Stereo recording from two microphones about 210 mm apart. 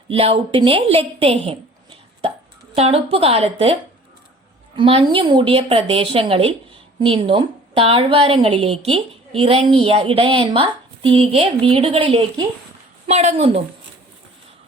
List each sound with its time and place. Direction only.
0.1 s a woman's voice: 25° right (ahead or behind)
2.7 s a woman's voice: 30° right (ahead or behind)
4.8 s a woman's voice: 25° right (ahead or behind)